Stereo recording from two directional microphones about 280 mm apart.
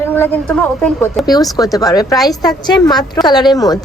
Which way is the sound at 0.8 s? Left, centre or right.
Centre.